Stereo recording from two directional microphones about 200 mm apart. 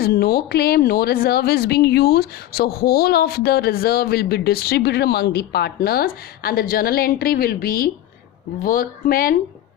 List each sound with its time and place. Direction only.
0.0 s speech: 50° left (ahead or behind)